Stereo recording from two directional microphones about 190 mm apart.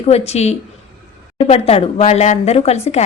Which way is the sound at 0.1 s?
35° left (ahead or behind).